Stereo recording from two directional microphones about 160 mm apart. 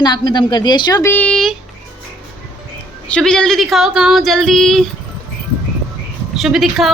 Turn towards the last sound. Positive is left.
turn(degrees=0)  # may be behind; listen again after turning